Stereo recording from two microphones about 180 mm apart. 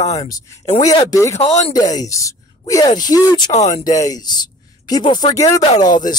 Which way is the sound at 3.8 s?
20° left (ahead or behind).